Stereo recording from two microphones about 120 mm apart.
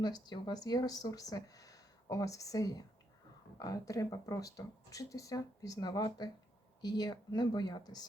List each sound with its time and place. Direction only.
0.0 s speech: 35° left (ahead or behind)